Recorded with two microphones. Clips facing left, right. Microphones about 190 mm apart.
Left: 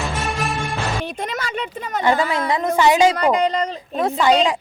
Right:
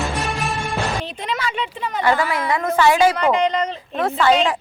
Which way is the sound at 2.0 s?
20° left (ahead or behind).